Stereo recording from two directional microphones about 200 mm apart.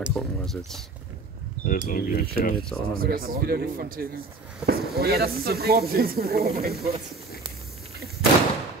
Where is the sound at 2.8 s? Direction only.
45° right (ahead or behind).